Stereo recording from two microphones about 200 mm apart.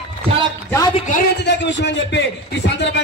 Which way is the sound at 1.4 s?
60° left (ahead or behind).